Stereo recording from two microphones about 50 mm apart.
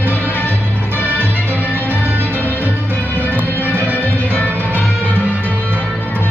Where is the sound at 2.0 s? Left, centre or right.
Right.